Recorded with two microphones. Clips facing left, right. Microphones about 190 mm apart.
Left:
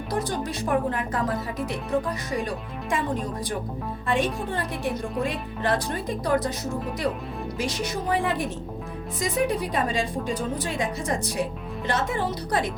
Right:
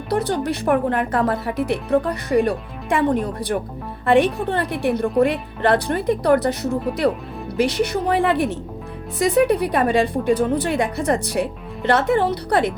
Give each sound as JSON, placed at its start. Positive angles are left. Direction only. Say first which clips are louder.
{"t": 0.1, "sound": "a woman's voice", "louder": "right 8 dB", "side_deg": -65}